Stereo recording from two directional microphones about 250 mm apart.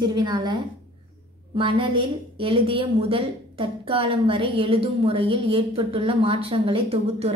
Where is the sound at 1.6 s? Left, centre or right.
Centre.